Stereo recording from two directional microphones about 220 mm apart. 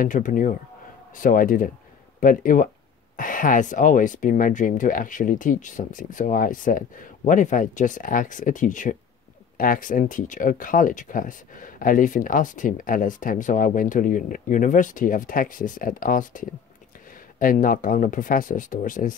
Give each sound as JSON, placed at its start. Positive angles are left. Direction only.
{"t": 0.0, "sound": "speech", "side_deg": 35}